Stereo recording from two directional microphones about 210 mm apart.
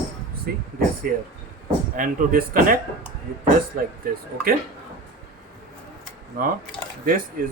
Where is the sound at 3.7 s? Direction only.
40° right (ahead or behind).